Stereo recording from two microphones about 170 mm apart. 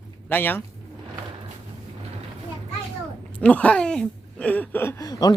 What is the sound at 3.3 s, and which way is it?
Speech, 10° left (ahead or behind).